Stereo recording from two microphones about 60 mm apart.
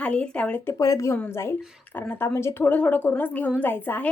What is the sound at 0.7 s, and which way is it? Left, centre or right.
Speech, left.